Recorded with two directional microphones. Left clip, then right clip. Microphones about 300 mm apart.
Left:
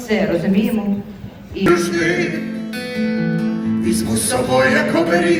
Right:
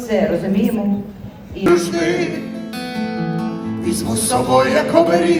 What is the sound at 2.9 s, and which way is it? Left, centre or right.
Speech, centre.